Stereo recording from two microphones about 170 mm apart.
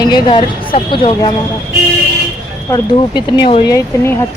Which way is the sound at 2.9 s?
25° left (ahead or behind).